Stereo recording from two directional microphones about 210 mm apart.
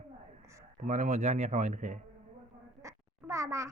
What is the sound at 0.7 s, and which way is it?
Speech, 35° right (ahead or behind).